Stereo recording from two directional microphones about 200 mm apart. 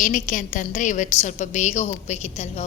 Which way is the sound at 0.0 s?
40° left (ahead or behind).